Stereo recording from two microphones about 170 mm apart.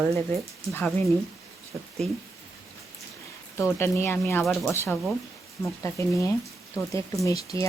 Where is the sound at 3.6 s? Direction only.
15° left (ahead or behind).